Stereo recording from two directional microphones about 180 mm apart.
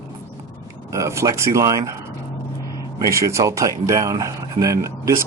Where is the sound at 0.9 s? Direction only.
15° right (ahead or behind).